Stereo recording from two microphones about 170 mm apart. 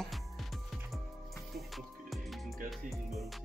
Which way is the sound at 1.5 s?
Centre (ahead or behind).